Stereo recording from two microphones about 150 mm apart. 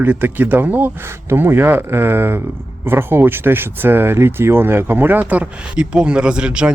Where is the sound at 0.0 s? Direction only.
10° right (ahead or behind).